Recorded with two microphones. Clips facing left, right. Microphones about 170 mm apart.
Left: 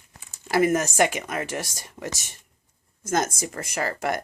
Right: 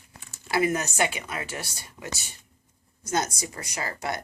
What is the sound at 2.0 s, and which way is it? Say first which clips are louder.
Speech: left 5 dB; 25° left (ahead or behind).